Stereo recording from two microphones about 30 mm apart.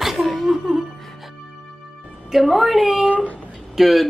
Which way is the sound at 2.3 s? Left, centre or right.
Centre.